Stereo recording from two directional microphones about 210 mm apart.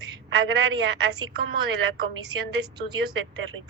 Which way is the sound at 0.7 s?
20° right (ahead or behind).